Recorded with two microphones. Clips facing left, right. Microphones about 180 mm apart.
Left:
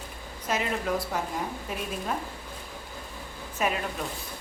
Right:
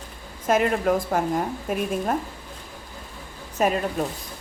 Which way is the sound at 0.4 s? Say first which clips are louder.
Right 8 dB; 50° right (ahead or behind).